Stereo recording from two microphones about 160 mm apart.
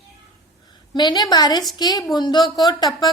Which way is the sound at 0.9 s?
25° left (ahead or behind).